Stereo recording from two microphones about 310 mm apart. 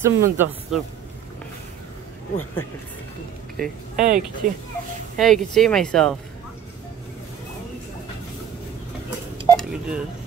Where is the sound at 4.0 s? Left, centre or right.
Right.